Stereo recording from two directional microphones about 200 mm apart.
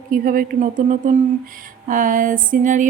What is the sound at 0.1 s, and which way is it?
Speech, 45° right (ahead or behind).